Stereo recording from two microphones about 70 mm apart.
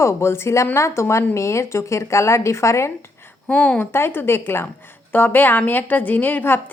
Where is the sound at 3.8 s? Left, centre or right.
Left.